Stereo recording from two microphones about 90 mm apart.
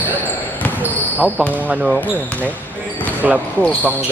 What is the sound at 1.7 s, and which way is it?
Speech, 5° right (ahead or behind).